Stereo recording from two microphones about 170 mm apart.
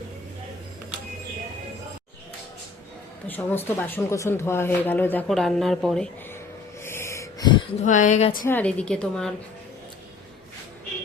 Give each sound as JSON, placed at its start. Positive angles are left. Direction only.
{"t": 3.2, "sound": "speech", "side_deg": 10}
{"t": 6.8, "sound": "a sound", "side_deg": 15}
{"t": 7.8, "sound": "speech", "side_deg": 45}
{"t": 8.4, "sound": "a woman's voice", "side_deg": 10}